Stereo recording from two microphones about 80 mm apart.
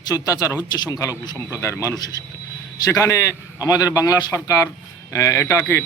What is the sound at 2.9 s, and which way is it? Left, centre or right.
A man's voice, left.